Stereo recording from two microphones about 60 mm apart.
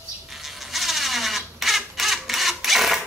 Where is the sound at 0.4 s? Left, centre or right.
Centre.